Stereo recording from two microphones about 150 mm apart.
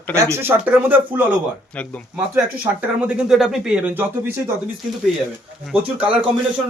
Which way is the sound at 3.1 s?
5° right (ahead or behind).